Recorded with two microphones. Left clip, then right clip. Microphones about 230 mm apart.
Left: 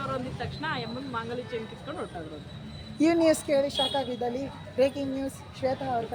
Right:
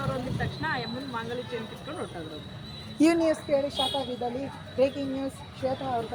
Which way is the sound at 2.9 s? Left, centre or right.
Centre.